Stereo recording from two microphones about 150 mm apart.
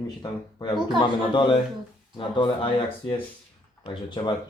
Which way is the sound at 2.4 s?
35° left (ahead or behind).